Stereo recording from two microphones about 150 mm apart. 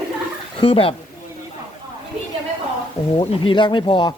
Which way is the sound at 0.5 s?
40° left (ahead or behind).